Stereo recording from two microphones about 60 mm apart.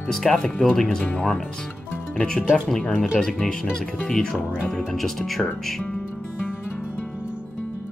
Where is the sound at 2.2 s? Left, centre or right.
Centre.